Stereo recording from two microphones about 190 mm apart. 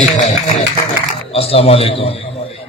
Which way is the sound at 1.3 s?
30° left (ahead or behind).